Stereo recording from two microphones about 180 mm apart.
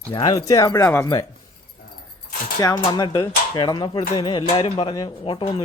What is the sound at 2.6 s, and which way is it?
A man's voice, 20° left (ahead or behind).